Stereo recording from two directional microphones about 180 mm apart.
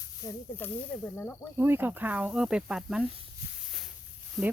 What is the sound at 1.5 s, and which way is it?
Speech, 10° right (ahead or behind).